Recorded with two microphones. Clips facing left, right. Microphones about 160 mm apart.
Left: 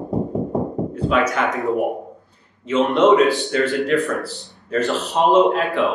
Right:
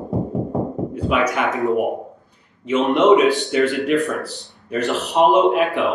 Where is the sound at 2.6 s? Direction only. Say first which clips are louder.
Right 1 dB; 15° right (ahead or behind).